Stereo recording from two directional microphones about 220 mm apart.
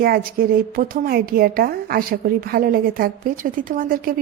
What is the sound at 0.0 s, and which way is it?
A woman's voice, 40° right (ahead or behind).